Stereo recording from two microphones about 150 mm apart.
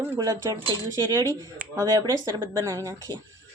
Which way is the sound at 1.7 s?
25° right (ahead or behind).